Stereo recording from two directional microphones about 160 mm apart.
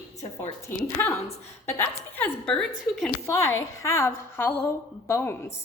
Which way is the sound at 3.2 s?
15° left (ahead or behind).